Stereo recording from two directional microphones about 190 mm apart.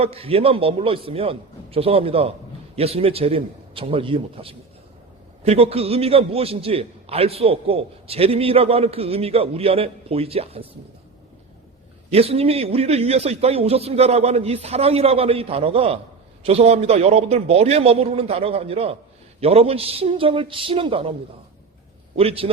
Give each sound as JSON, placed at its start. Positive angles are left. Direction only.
{"t": 0.0, "sound": "a man's voice", "side_deg": -30}
{"t": 12.1, "sound": "a man's voice", "side_deg": -30}
{"t": 22.1, "sound": "a man's voice", "side_deg": -30}